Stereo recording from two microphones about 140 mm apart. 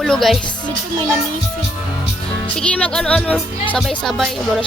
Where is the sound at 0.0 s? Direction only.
Centre (ahead or behind).